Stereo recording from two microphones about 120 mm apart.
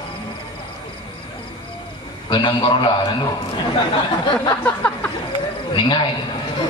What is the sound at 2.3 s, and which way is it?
Speech, 40° left (ahead or behind).